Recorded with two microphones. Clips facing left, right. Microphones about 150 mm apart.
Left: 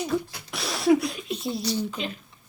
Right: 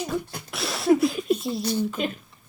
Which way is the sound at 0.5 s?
Centre (ahead or behind).